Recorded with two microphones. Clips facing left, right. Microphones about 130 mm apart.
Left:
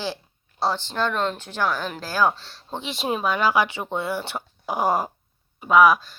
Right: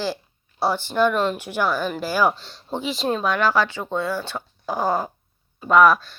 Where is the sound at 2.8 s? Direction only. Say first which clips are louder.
Right 3 dB; centre (ahead or behind); by 4.9 s 20° left (ahead or behind).